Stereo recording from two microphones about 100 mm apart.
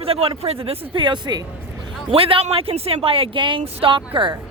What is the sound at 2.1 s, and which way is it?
A woman's voice, 70° right (ahead or behind).